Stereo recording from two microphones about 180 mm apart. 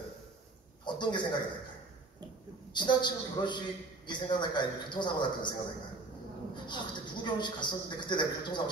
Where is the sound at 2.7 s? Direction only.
25° left (ahead or behind).